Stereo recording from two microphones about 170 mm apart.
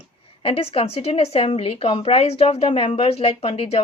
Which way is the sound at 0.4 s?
35° left (ahead or behind).